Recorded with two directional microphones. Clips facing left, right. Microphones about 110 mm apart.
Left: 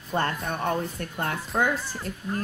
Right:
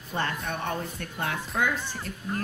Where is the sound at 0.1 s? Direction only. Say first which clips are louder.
Left 3 dB; 40° left (ahead or behind).